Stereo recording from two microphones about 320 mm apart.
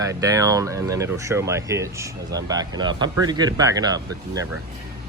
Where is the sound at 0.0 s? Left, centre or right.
Centre.